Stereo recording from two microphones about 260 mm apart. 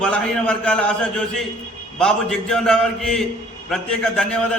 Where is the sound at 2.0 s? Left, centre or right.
Centre.